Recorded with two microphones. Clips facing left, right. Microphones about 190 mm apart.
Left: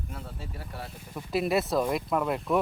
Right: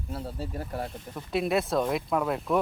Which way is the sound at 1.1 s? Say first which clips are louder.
Even; centre (ahead or behind).